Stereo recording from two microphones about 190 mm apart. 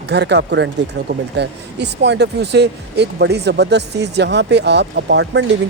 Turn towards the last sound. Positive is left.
turn(degrees=-65)  # may be behind; listen again after turning